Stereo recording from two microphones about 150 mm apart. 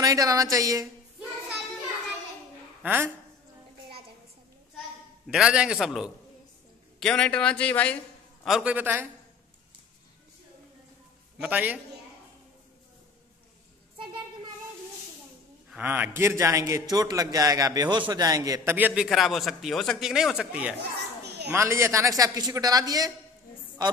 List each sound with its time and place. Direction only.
0.0 s a man's voice: 25° right (ahead or behind)
2.8 s a woman's voice: 10° right (ahead or behind)
5.3 s speech: 5° right (ahead or behind)
7.0 s speech: 5° left (ahead or behind)
8.5 s a man's voice: 5° right (ahead or behind)
11.4 s a man's voice: 10° right (ahead or behind)
13.9 s a sound: 35° right (ahead or behind)
15.7 s a man's voice: 10° right (ahead or behind)
19.0 s speech: centre (ahead or behind)
21.2 s children playing: 90° right
21.5 s a man's voice: 20° right (ahead or behind)